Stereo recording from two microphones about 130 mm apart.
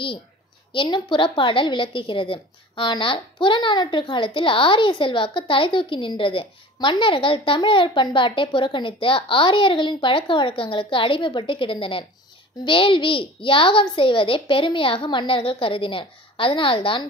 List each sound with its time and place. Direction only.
0.7 s a woman's voice: 35° left (ahead or behind)